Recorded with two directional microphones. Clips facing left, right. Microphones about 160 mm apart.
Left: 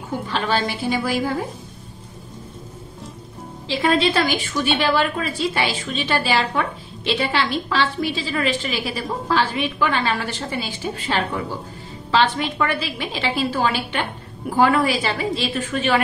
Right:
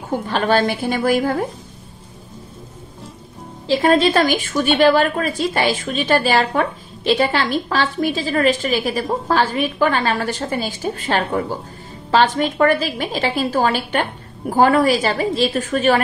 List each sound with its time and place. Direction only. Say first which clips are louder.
0.3 s a woman's voice: right 6 dB; 50° right (ahead or behind)
3.6 s a woman's voice: right 4 dB; 45° right (ahead or behind)